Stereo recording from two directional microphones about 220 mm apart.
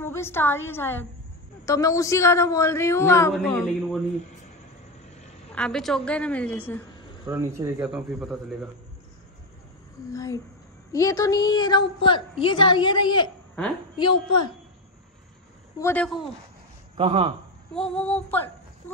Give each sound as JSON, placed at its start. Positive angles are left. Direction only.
{"t": 0.0, "sound": "a woman's voice", "side_deg": 10}
{"t": 5.5, "sound": "speech", "side_deg": 5}
{"t": 7.2, "sound": "speech", "side_deg": -10}
{"t": 10.1, "sound": "a woman's voice", "side_deg": 15}
{"t": 15.8, "sound": "a woman's voice", "side_deg": 10}
{"t": 16.9, "sound": "speech", "side_deg": -25}
{"t": 17.7, "sound": "speech", "side_deg": 5}